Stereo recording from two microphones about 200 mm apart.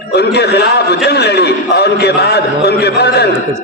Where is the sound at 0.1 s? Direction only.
55° left (ahead or behind).